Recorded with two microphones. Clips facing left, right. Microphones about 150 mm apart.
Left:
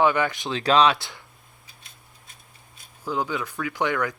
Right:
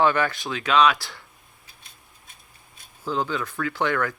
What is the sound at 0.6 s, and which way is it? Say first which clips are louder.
Speech: left 1 dB; 35° left (ahead or behind).